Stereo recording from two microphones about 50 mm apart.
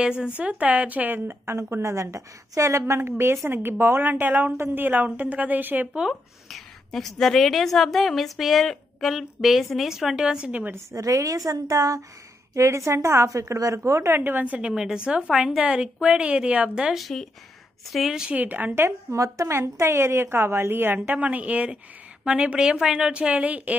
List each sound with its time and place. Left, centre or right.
0.4 s a woman's voice: right
3.0 s a woman's voice: right
6.5 s a woman's voice: centre
10.2 s a woman's voice: centre
10.9 s a woman's voice: right
14.1 s a woman's voice: right
14.8 s a woman's voice: centre
17.9 s a woman's voice: centre
18.3 s a woman's voice: right
19.1 s a woman's voice: right
21.1 s a woman's voice: right